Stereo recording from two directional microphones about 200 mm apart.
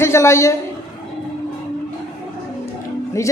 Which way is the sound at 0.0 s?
15° left (ahead or behind).